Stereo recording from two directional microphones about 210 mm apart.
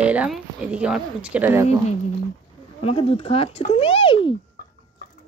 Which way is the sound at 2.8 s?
25° left (ahead or behind).